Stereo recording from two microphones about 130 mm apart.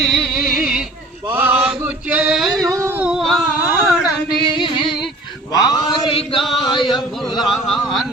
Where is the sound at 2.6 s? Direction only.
25° right (ahead or behind).